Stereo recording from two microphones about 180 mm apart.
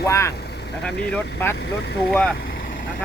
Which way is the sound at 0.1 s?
15° left (ahead or behind).